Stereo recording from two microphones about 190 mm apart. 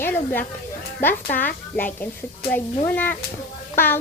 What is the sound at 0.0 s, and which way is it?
Speech, 10° left (ahead or behind).